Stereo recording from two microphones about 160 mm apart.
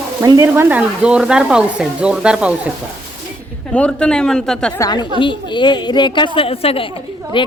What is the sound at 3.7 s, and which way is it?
Speech, 5° left (ahead or behind).